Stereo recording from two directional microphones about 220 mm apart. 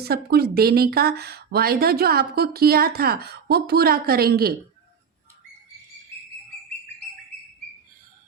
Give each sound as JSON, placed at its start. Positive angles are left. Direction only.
{"t": 0.0, "sound": "speech", "side_deg": -45}